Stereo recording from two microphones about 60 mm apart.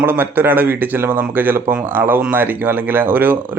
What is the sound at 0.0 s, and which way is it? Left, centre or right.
Speech, right.